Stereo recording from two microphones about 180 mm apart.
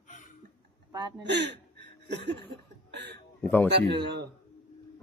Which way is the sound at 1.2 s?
70° right (ahead or behind).